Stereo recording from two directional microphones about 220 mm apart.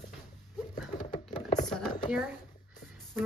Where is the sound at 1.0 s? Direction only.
35° left (ahead or behind).